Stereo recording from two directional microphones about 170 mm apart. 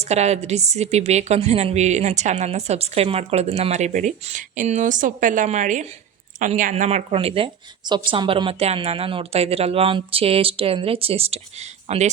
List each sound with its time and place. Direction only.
0.0 s a woman's voice: 40° right (ahead or behind)